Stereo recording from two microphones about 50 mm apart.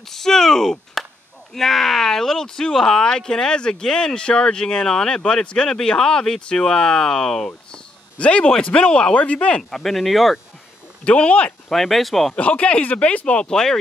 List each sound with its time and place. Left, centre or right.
0.1 s a sound: centre
1.5 s speech: centre
7.7 s a sound: left
8.6 s speech: left
9.6 s speech: centre
11.1 s speech: left
11.7 s speech: centre
12.4 s speech: left
13.5 s speech: centre